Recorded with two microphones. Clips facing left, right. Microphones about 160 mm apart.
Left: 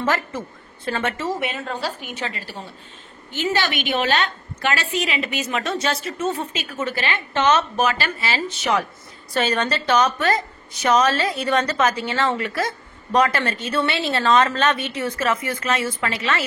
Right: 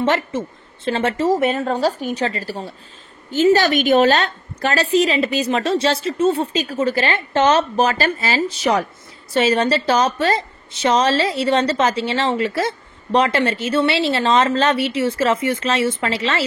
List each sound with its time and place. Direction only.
0.0 s a woman's voice: 25° right (ahead or behind)
1.1 s a woman's voice: 40° right (ahead or behind)